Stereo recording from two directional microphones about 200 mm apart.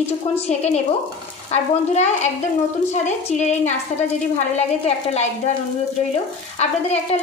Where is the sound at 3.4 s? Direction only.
35° left (ahead or behind).